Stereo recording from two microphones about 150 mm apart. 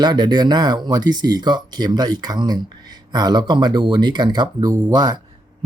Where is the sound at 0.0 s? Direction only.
30° right (ahead or behind).